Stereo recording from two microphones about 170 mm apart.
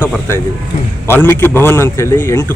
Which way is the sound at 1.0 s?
15° left (ahead or behind).